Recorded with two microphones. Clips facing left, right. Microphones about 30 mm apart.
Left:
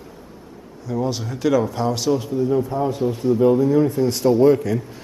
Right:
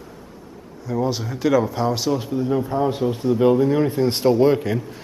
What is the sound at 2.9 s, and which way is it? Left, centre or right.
A man's voice, right.